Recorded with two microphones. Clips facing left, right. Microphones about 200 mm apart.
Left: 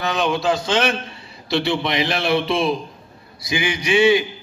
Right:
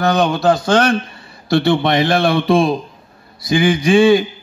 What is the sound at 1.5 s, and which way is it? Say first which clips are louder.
A man's voice: right 7 dB; 50° right (ahead or behind).